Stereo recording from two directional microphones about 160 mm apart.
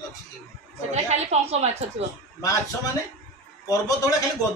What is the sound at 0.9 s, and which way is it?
Speech, 45° right (ahead or behind).